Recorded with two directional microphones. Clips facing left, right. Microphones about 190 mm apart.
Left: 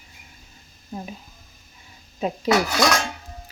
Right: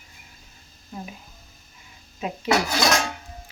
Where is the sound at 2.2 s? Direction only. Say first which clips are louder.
Left 5 dB; 35° left (ahead or behind).